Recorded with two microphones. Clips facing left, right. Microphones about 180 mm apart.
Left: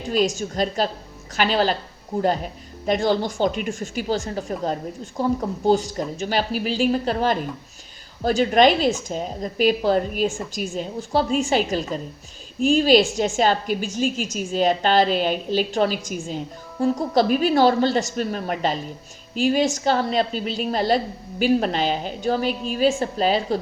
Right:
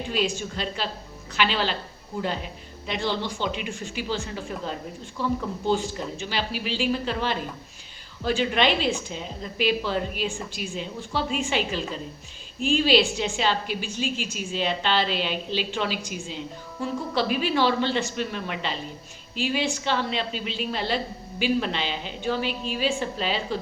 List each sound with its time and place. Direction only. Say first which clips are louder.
0.1 s a woman's voice: left 7 dB; 40° left (ahead or behind)